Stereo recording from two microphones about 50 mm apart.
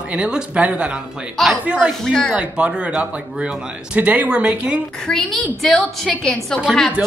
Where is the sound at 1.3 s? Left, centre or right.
Centre.